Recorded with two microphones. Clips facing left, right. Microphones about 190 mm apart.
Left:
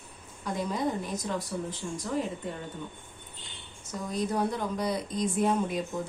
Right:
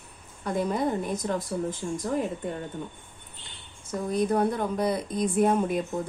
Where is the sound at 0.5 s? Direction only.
55° right (ahead or behind).